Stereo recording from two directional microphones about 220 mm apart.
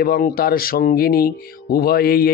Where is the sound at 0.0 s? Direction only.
45° left (ahead or behind).